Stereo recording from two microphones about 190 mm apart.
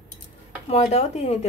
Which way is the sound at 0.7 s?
35° left (ahead or behind).